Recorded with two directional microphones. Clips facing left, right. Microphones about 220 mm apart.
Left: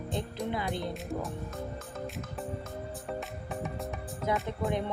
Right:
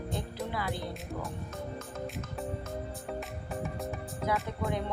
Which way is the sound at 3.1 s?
Centre (ahead or behind).